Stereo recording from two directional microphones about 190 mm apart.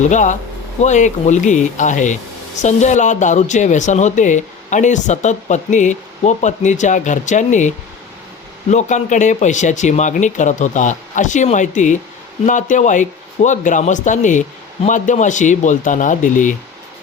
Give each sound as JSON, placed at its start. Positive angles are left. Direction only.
{"t": 0.0, "sound": "speech", "side_deg": 40}
{"t": 8.7, "sound": "speech", "side_deg": 40}